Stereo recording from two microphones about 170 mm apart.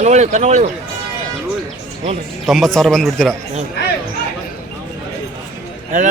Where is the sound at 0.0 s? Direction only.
40° right (ahead or behind).